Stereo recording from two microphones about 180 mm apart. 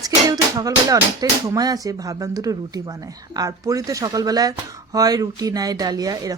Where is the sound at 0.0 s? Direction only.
20° right (ahead or behind).